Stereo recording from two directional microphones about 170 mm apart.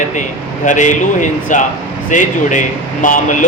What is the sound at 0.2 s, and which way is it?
A man's voice, 45° left (ahead or behind).